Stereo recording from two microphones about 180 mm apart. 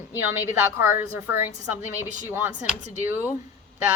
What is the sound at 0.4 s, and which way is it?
Speech, 15° right (ahead or behind).